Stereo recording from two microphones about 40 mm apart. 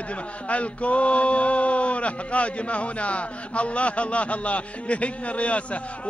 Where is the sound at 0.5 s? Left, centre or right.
Left.